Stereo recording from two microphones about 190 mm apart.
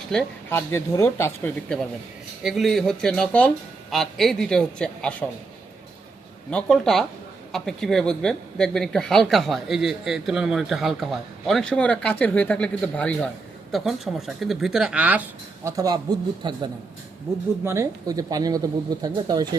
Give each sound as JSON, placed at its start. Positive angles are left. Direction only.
{"t": 0.1, "sound": "speech", "side_deg": 10}
{"t": 2.4, "sound": "speech", "side_deg": 0}
{"t": 6.5, "sound": "speech", "side_deg": 5}
{"t": 17.7, "sound": "speech", "side_deg": -15}